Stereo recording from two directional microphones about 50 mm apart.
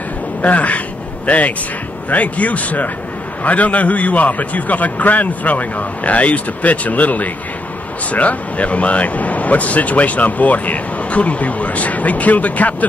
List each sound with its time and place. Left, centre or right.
0.4 s a man's voice: left